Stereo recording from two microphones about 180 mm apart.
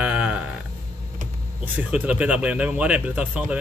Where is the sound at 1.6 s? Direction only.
10° right (ahead or behind).